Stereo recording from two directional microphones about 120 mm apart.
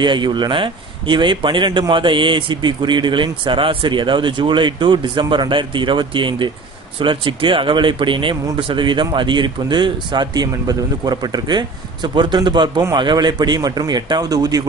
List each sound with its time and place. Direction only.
0.0 s a man's voice: 40° right (ahead or behind)